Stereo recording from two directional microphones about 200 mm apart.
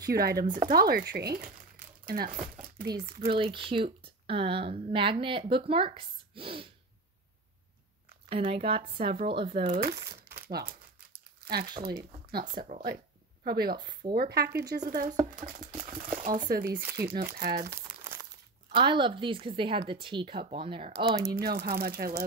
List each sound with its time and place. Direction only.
0.0 s speech: 50° right (ahead or behind)
3.3 s speech: 25° right (ahead or behind)
8.3 s speech: 30° right (ahead or behind)
9.8 s speech: 50° right (ahead or behind)
10.3 s crumpling: 50° right (ahead or behind)
11.4 s speech: 50° right (ahead or behind)
13.7 s speech: 20° right (ahead or behind)
14.1 s speech: 50° right (ahead or behind)
14.8 s speech: 40° right (ahead or behind)
18.0 s crumpling: 15° right (ahead or behind)
18.8 s speech: 25° right (ahead or behind)
21.3 s speech: 50° right (ahead or behind)